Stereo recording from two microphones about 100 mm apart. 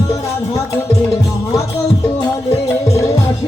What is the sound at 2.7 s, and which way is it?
Music, 30° left (ahead or behind).